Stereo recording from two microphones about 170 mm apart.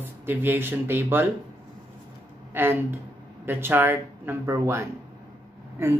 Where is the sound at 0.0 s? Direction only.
10° right (ahead or behind).